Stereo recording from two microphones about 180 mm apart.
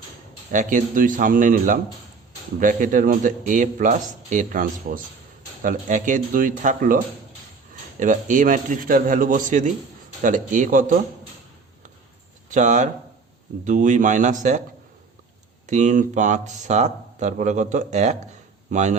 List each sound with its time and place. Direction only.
0.5 s a man's voice: 45° right (ahead or behind)
12.5 s a man's voice: 45° right (ahead or behind)
15.6 s speech: 40° right (ahead or behind)